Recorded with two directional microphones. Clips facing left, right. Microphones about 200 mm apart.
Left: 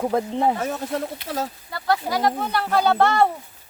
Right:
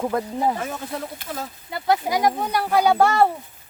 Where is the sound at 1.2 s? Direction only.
40° left (ahead or behind).